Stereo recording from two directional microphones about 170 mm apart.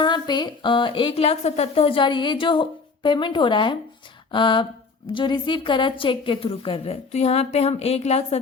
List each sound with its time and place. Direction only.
0.0 s a woman's voice: 25° left (ahead or behind)